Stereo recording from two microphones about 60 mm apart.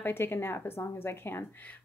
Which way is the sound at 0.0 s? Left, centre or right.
Left.